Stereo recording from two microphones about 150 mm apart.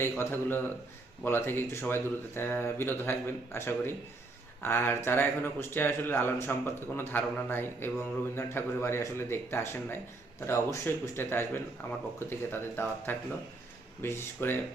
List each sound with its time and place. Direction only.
0.0 s a man's voice: 15° left (ahead or behind)